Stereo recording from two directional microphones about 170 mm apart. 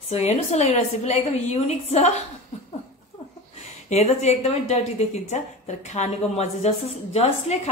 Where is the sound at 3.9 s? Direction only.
40° left (ahead or behind).